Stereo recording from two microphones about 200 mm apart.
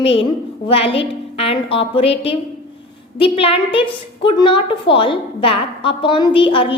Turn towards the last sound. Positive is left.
turn(degrees=25)  # may be behind; listen again after turning